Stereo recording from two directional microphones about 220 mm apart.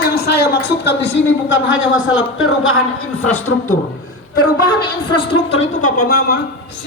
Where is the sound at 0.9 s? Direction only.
55° left (ahead or behind).